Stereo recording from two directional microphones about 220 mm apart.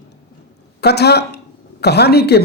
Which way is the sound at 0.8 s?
50° left (ahead or behind).